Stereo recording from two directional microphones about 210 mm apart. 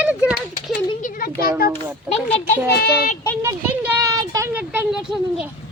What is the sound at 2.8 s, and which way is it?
Speech, 45° left (ahead or behind).